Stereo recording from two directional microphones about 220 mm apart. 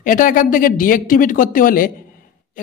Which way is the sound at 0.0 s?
40° left (ahead or behind).